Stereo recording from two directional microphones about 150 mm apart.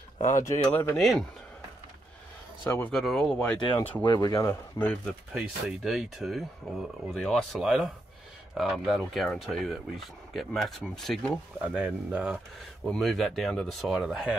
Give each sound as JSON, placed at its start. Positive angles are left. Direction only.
{"t": 0.2, "sound": "speech", "side_deg": 55}
{"t": 0.5, "sound": "speech", "side_deg": 20}
{"t": 2.9, "sound": "speech", "side_deg": 0}
{"t": 4.0, "sound": "speech", "side_deg": 25}
{"t": 4.7, "sound": "speech", "side_deg": 10}
{"t": 5.3, "sound": "speech", "side_deg": -5}